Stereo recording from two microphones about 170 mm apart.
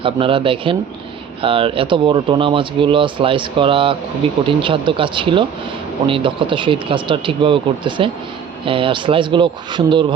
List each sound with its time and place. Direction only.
0.0 s speech: 30° right (ahead or behind)